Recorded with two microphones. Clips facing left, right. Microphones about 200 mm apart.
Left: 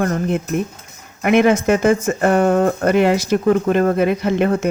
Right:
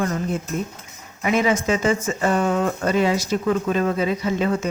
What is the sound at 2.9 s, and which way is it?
Speech, 65° left (ahead or behind).